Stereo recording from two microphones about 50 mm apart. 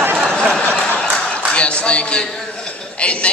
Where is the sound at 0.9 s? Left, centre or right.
Centre.